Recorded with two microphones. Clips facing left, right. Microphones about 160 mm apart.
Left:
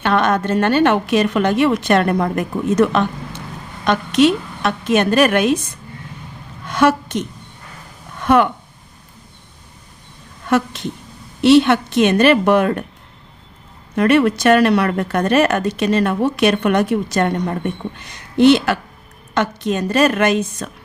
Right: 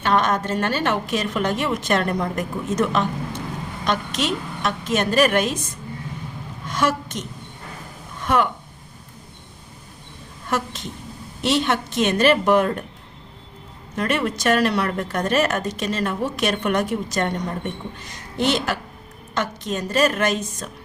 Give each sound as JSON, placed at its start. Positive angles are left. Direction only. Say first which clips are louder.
{"t": 0.0, "sound": "speech", "louder": "left 4 dB", "side_deg": 65}
{"t": 6.7, "sound": "a woman's voice", "louder": "left 7 dB", "side_deg": 65}
{"t": 11.4, "sound": "speech", "louder": "left 10 dB", "side_deg": 65}
{"t": 13.9, "sound": "speech", "louder": "left 9 dB", "side_deg": 65}
{"t": 18.3, "sound": "speech", "louder": "left 10 dB", "side_deg": 70}